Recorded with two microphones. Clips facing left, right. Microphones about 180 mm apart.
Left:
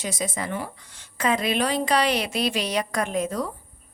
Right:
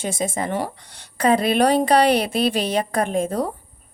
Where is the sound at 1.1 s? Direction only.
35° right (ahead or behind).